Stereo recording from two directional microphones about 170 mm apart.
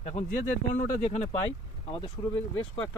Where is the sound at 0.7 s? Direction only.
45° left (ahead or behind).